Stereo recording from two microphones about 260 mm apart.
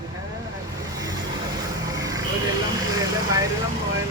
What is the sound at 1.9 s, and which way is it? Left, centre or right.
Vehicle, centre.